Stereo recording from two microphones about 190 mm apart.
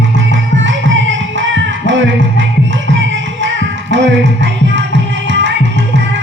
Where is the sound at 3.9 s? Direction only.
70° right (ahead or behind).